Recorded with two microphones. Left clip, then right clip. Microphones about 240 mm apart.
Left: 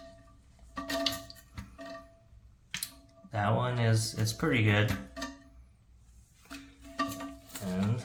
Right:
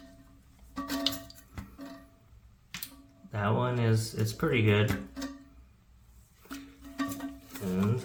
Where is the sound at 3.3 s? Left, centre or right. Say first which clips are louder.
Even; centre.